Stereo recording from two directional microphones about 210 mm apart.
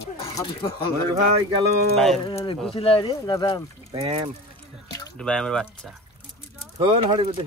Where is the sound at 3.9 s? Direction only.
20° right (ahead or behind).